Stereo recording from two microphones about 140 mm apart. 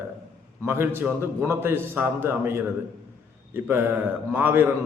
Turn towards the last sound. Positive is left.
turn(degrees=-15)  # may be behind; listen again after turning